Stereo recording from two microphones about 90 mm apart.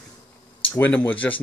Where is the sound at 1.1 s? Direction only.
20° left (ahead or behind).